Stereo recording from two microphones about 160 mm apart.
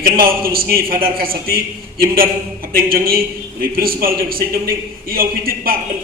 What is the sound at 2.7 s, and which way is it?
A man's voice, 65° right (ahead or behind).